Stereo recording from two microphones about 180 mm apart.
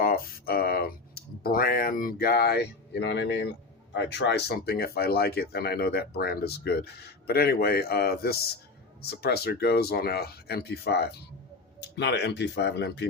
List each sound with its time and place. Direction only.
0.0 s clicking: 55° left (ahead or behind); by 3.5 s 75° left (ahead or behind)
3.9 s speech: 70° left (ahead or behind)